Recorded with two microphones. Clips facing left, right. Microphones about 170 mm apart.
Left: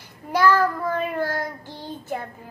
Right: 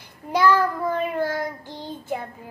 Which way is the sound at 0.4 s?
15° right (ahead or behind).